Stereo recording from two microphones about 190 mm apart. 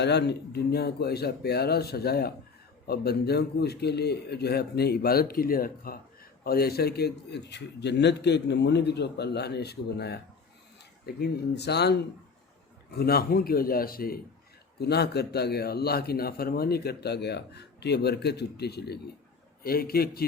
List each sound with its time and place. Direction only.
0.0 s a man's voice: 60° left (ahead or behind)